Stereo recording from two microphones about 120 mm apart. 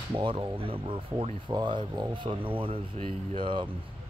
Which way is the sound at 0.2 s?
45° right (ahead or behind).